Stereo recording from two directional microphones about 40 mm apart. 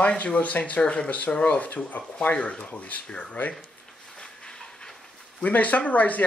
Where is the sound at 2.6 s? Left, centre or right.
Left.